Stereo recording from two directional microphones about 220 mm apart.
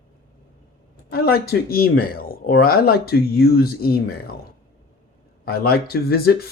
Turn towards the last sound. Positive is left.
turn(degrees=45)  # may be behind; listen again after turning